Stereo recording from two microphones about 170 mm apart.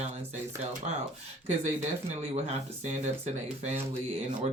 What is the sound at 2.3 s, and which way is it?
Speech, 40° right (ahead or behind).